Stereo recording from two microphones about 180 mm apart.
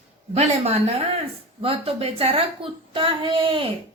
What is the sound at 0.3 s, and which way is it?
A woman's voice, 35° right (ahead or behind).